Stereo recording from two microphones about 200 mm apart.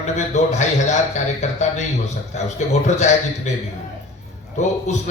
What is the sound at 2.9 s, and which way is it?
Speech, 35° left (ahead or behind).